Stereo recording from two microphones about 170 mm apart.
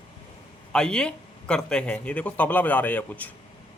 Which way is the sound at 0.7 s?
5° left (ahead or behind).